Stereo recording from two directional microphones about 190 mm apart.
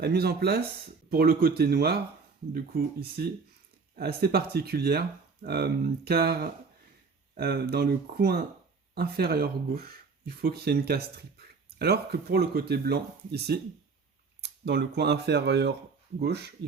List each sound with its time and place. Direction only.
0.0 s speech: 55° right (ahead or behind)